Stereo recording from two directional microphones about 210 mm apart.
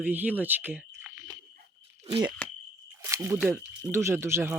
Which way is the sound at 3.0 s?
15° right (ahead or behind).